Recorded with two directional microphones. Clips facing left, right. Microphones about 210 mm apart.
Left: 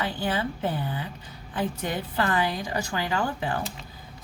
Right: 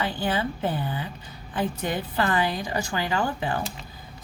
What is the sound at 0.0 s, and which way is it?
A woman's voice, 25° right (ahead or behind).